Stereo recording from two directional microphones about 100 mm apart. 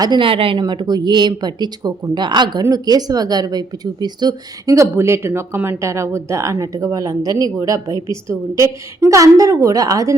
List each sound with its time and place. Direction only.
0.0 s speech: 45° right (ahead or behind)
0.3 s a woman's voice: 65° right (ahead or behind)
0.6 s speech: 45° right (ahead or behind)